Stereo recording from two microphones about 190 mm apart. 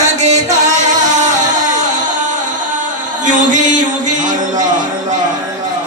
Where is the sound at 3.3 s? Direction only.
40° right (ahead or behind).